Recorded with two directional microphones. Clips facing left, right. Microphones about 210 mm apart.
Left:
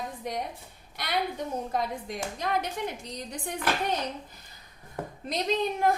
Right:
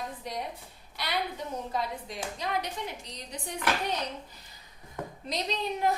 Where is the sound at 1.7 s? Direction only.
50° left (ahead or behind).